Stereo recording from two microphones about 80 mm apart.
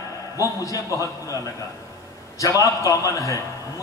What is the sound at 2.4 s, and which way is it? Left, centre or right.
Speech, left.